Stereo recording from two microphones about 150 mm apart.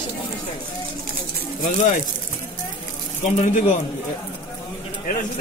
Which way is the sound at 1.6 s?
60° left (ahead or behind).